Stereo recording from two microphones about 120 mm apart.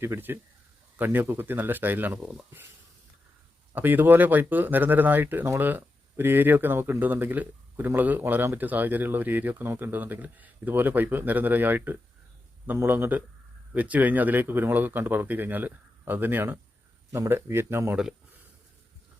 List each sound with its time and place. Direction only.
0.0 s speech: 20° right (ahead or behind)
3.7 s speech: 15° right (ahead or behind)